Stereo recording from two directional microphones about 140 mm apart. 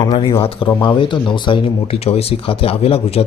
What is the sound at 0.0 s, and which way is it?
Speech, 35° left (ahead or behind).